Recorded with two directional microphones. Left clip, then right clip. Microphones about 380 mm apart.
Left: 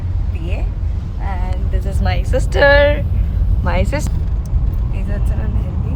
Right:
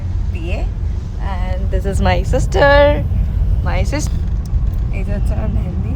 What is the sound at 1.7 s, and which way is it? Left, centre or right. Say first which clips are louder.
Speech: right 7 dB; right.